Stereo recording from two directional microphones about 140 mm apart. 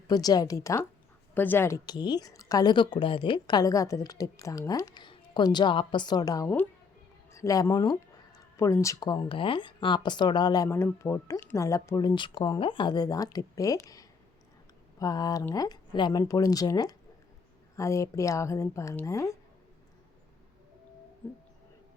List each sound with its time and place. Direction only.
0.1 s a woman's voice: 25° left (ahead or behind)
1.9 s a woman's voice: 30° left (ahead or behind)